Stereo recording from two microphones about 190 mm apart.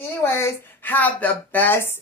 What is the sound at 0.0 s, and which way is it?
Speech, 15° left (ahead or behind).